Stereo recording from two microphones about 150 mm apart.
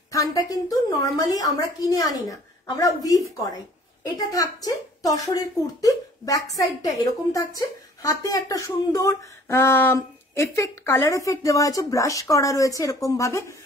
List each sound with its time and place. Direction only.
0.1 s a woman's voice: 25° left (ahead or behind)